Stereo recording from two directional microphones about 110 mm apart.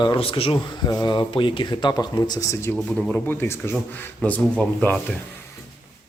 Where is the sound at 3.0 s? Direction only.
10° left (ahead or behind).